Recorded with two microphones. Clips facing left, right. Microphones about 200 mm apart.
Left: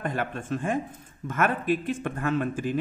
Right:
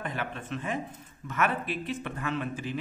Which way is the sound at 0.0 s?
45° left (ahead or behind).